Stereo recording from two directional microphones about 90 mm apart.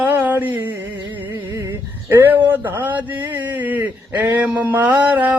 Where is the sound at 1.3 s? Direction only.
40° right (ahead or behind).